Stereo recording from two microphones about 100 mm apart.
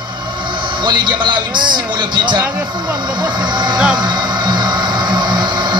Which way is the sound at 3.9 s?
45° right (ahead or behind).